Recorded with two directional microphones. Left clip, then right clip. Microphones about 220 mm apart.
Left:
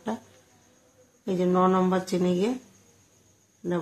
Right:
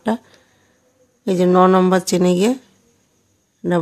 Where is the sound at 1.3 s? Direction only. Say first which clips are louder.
Right 10 dB; 50° right (ahead or behind).